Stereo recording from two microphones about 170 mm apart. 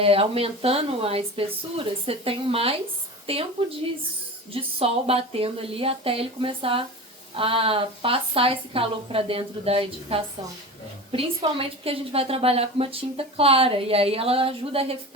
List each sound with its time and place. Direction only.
0.0 s a woman's voice: 35° right (ahead or behind)
4.5 s a woman's voice: 35° right (ahead or behind)